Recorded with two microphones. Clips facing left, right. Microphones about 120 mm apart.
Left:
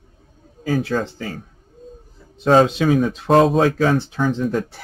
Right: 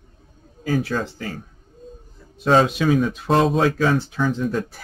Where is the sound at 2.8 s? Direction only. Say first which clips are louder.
Left 2 dB; 45° left (ahead or behind).